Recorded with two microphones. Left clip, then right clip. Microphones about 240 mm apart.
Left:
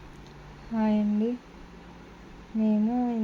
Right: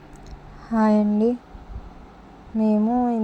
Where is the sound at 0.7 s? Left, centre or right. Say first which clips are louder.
Right 8 dB; right.